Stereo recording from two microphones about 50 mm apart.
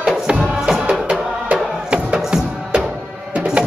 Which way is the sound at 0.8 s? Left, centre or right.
Right.